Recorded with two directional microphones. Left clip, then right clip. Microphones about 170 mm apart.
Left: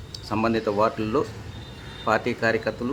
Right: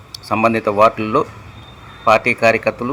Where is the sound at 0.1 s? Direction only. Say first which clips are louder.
Right 9 dB; 20° right (ahead or behind).